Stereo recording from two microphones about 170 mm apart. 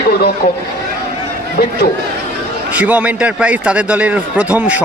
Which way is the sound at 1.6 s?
65° left (ahead or behind).